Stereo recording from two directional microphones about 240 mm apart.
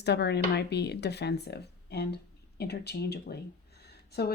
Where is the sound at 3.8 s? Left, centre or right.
Left.